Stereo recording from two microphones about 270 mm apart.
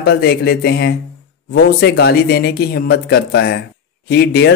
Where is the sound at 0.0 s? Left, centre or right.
Left.